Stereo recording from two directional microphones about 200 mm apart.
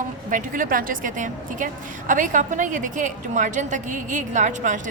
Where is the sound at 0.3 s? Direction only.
40° right (ahead or behind).